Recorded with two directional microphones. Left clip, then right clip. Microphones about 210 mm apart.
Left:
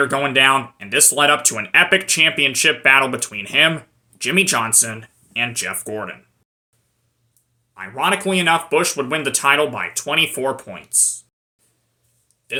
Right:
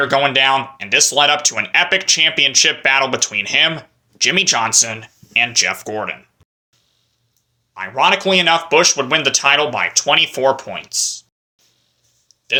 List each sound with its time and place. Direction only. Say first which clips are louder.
0.0 s speech: right 2 dB; 15° left (ahead or behind)
7.7 s speech: right 5 dB; 10° left (ahead or behind)